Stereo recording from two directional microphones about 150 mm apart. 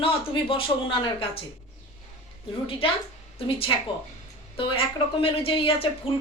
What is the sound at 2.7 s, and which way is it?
Speech, 35° left (ahead or behind).